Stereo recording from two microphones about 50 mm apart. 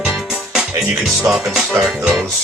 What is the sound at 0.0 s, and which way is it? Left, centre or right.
Music, centre.